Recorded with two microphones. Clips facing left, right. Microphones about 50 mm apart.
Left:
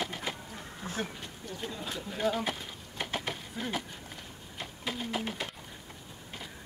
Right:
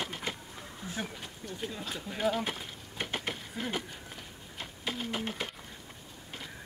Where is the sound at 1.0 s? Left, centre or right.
Centre.